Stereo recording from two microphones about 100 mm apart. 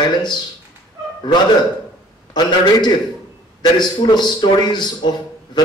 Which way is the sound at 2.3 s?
45° left (ahead or behind).